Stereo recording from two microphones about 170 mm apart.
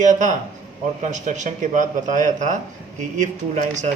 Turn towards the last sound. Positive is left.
turn(degrees=-45)  # may be behind; listen again after turning